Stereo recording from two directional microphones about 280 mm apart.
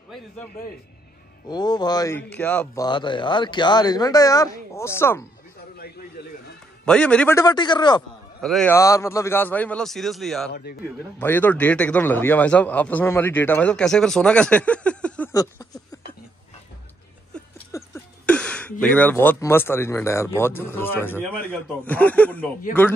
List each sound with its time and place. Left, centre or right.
1.5 s a man's voice: centre
5.8 s a sound: left
6.9 s a man's voice: centre
8.4 s a man's voice: centre
10.5 s speech: left
11.1 s a man's voice: centre
17.3 s a sound: centre
18.9 s a man's voice: centre